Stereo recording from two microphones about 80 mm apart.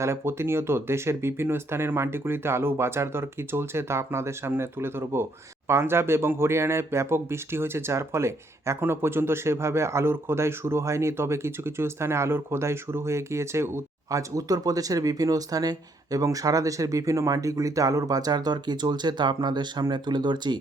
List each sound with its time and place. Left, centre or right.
0.0 s a man's voice: right